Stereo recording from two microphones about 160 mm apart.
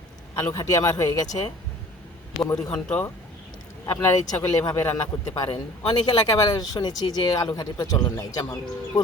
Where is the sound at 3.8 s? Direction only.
20° left (ahead or behind).